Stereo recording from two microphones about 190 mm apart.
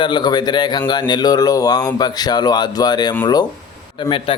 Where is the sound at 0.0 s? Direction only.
25° left (ahead or behind).